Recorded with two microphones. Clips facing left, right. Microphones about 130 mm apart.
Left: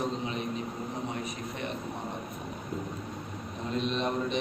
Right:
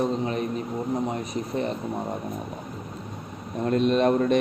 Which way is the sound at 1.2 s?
35° right (ahead or behind).